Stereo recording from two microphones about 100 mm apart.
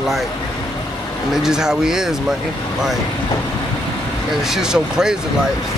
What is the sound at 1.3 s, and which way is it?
Speech, 5° right (ahead or behind).